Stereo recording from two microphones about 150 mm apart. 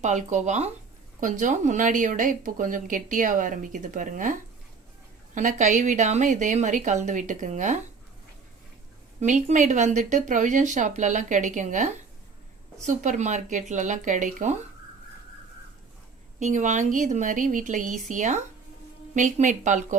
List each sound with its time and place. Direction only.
0.0 s speech: 50° right (ahead or behind)
9.2 s speech: 55° right (ahead or behind)
16.4 s speech: 55° right (ahead or behind)